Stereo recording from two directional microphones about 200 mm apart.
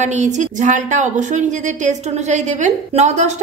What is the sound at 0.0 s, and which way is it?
A woman's voice, 35° right (ahead or behind).